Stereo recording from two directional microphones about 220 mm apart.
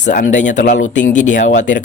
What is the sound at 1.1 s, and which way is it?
Speech, 35° left (ahead or behind).